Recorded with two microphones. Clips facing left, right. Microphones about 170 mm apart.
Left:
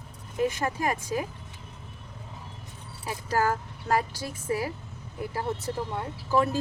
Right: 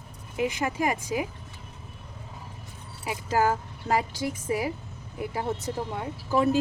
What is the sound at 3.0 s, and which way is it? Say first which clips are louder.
Speech: right 2 dB; 20° right (ahead or behind).